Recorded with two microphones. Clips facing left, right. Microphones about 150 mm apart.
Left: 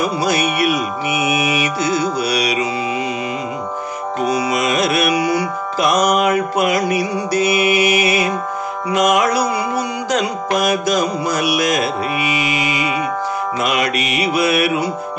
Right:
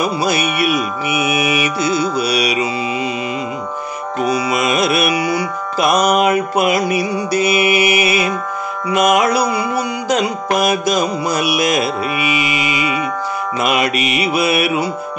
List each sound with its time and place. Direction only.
1.4 s mantra: 10° right (ahead or behind)
2.2 s music: 10° right (ahead or behind)
4.6 s music: 10° right (ahead or behind)
11.0 s music: 10° right (ahead or behind)
13.7 s mantra: 10° right (ahead or behind)